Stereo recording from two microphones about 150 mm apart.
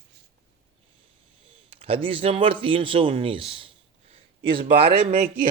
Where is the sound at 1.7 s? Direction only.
40° right (ahead or behind).